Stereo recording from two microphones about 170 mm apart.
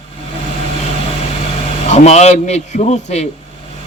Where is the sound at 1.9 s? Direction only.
40° left (ahead or behind).